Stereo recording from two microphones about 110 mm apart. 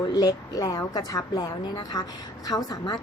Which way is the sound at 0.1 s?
40° left (ahead or behind).